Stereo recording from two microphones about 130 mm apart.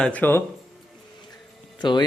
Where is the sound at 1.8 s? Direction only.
35° left (ahead or behind).